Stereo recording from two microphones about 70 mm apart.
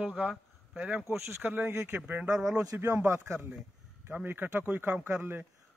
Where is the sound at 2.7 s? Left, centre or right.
Right.